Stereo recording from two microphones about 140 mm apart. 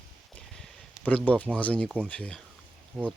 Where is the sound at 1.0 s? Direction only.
10° left (ahead or behind).